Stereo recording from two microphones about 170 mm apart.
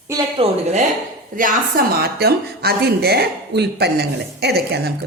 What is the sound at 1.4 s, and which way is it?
A woman's voice, 55° right (ahead or behind).